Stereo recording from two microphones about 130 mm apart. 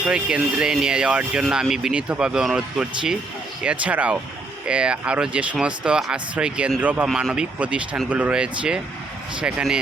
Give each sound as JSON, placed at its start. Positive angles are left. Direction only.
{"t": 0.1, "sound": "speech", "side_deg": -5}